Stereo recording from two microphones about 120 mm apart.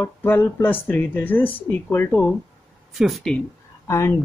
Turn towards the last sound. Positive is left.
turn(degrees=25)  # may be behind; listen again after turning